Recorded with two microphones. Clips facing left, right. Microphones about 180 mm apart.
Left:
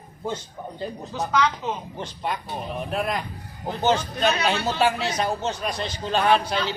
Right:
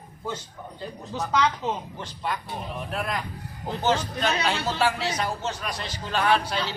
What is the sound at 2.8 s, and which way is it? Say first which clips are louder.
A man's voice: left 4 dB; 20° left (ahead or behind).